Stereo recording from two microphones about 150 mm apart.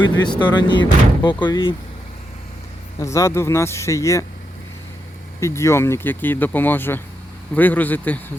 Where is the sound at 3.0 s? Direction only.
20° left (ahead or behind).